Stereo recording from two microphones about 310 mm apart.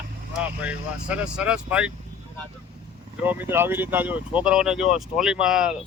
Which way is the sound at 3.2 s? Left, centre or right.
Centre.